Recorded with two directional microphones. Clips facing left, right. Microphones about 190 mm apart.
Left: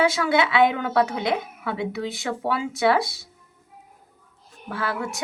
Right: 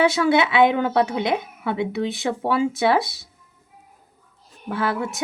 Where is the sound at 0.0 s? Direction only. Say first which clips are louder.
Right 3 dB; 25° right (ahead or behind).